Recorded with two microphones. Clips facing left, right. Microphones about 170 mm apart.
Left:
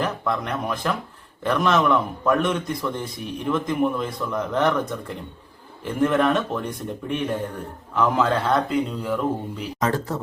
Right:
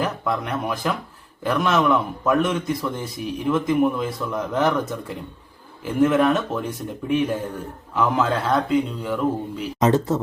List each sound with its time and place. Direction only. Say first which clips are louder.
0.0 s a man's voice: right 1 dB; 5° right (ahead or behind)
9.8 s speech: right 6 dB; 20° right (ahead or behind)